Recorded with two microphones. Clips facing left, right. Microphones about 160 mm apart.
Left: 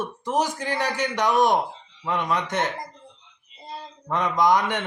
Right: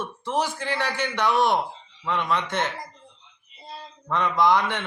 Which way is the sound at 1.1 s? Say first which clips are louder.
Left 1 dB; 15° left (ahead or behind).